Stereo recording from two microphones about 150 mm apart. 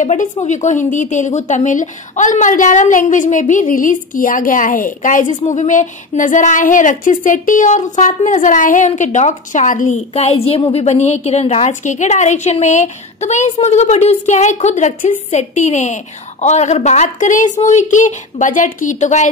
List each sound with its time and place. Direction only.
0.0 s a woman's voice: 50° left (ahead or behind)